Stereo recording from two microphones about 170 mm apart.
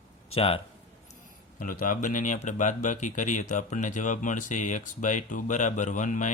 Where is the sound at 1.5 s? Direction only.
55° left (ahead or behind).